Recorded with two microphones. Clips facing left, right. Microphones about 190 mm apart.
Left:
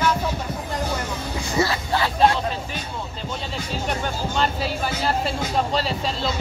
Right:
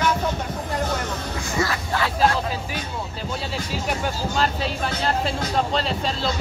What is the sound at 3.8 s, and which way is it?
Speech, 5° right (ahead or behind).